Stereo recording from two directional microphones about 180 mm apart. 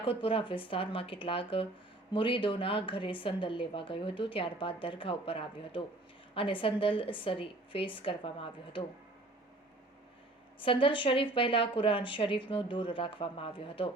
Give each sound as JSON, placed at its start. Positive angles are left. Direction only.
{"t": 0.0, "sound": "a woman's voice", "side_deg": 30}
{"t": 10.6, "sound": "a woman's voice", "side_deg": 30}